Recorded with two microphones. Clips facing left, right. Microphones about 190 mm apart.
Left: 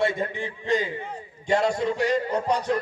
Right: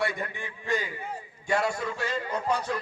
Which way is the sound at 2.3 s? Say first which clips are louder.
Left 4 dB; 35° left (ahead or behind).